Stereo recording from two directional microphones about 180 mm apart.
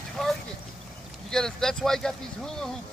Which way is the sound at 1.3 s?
Centre (ahead or behind).